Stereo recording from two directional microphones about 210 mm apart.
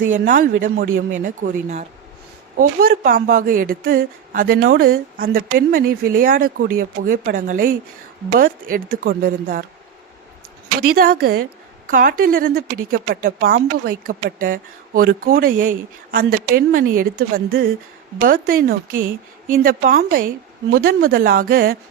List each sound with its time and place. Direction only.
0.0 s a woman's voice: 40° right (ahead or behind)
2.6 s speech: 45° right (ahead or behind)
10.8 s speech: 45° right (ahead or behind)